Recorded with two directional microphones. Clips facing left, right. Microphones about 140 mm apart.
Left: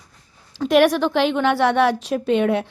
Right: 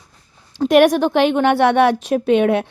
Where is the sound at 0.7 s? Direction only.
55° right (ahead or behind).